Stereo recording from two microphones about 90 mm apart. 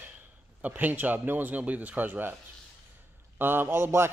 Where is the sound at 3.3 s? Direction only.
25° right (ahead or behind).